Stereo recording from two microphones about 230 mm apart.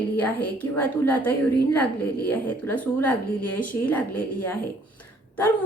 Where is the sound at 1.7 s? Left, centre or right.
Left.